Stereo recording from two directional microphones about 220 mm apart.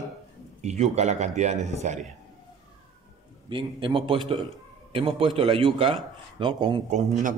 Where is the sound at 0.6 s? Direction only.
30° right (ahead or behind).